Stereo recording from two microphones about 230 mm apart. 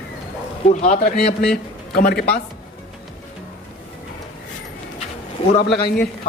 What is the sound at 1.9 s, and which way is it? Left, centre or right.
Speech, left.